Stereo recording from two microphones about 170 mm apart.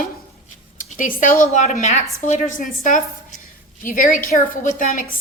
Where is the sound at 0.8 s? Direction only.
50° left (ahead or behind).